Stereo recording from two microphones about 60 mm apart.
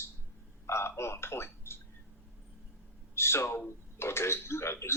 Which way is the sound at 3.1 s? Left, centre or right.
Left.